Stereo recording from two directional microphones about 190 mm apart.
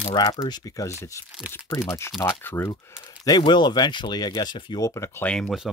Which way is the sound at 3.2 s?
20° left (ahead or behind).